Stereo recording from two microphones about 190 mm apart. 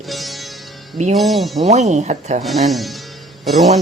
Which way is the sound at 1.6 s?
35° right (ahead or behind).